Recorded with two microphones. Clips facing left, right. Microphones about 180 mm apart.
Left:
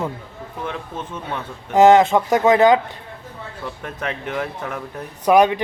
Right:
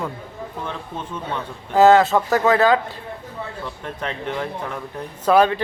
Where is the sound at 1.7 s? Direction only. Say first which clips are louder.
Left 1 dB; 20° left (ahead or behind).